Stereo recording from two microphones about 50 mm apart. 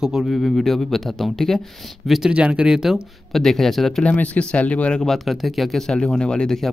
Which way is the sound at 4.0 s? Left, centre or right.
Left.